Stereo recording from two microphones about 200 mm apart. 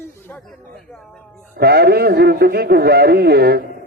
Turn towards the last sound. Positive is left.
turn(degrees=-50)  # may be behind; listen again after turning